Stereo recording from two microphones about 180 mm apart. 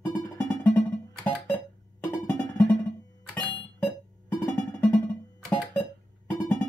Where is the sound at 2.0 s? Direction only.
10° left (ahead or behind).